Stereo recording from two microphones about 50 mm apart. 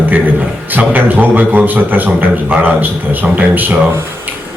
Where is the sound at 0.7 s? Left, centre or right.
Right.